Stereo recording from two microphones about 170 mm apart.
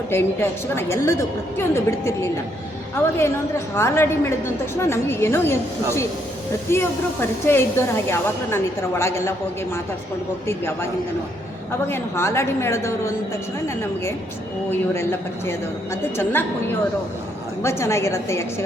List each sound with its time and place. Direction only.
0.1 s a woman's voice: 15° left (ahead or behind)
6.7 s a woman's voice: 15° left (ahead or behind)
10.4 s a woman's voice: 15° left (ahead or behind)
11.9 s a woman's voice: 15° left (ahead or behind)
17.6 s a woman's voice: 15° left (ahead or behind)